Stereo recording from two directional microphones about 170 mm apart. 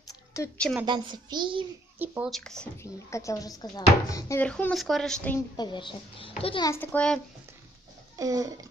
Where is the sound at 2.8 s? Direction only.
15° left (ahead or behind).